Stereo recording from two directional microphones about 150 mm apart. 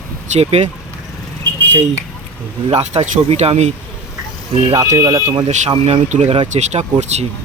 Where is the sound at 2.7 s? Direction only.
45° right (ahead or behind).